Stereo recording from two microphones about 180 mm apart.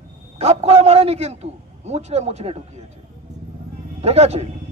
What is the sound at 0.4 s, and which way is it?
A man's voice, 35° right (ahead or behind).